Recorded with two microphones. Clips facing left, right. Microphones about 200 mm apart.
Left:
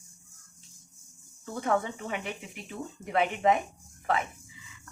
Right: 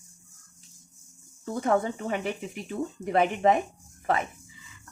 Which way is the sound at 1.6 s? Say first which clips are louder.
Right 3 dB; 40° right (ahead or behind).